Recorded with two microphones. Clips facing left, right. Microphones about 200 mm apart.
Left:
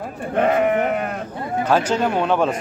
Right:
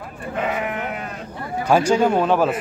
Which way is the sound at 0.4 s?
55° left (ahead or behind).